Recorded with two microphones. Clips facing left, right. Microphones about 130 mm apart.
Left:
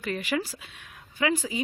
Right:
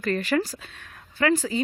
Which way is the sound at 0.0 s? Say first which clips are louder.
Right 5 dB; 10° left (ahead or behind).